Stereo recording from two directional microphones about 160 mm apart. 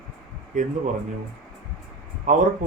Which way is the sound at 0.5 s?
50° right (ahead or behind).